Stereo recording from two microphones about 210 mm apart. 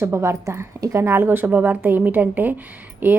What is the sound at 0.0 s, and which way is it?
A woman's voice, 15° right (ahead or behind).